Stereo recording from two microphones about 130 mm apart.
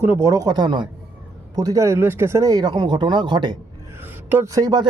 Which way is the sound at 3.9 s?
15° right (ahead or behind).